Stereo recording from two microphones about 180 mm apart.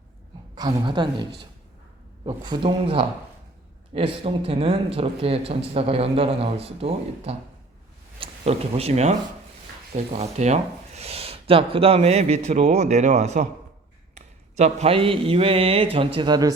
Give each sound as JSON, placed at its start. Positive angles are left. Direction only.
{"t": 0.5, "sound": "speech", "side_deg": -25}